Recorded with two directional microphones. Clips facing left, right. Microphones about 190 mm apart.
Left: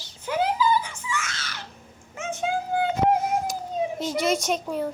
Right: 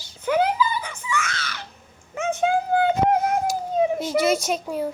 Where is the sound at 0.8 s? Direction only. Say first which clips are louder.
Right 2 dB; 60° right (ahead or behind).